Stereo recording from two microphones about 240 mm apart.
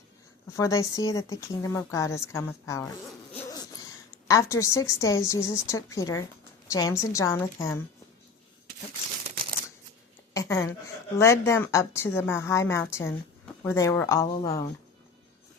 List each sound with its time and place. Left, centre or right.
0.5 s speech: centre
3.3 s hoot: centre
4.3 s speech: centre
10.3 s a sound: centre
11.2 s speech: centre